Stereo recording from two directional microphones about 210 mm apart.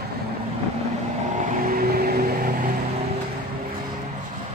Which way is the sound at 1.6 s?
45° right (ahead or behind).